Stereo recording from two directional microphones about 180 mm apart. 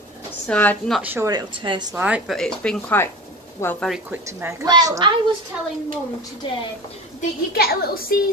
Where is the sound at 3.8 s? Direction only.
5° right (ahead or behind).